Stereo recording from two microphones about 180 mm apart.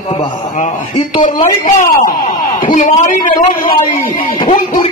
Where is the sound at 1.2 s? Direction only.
45° left (ahead or behind).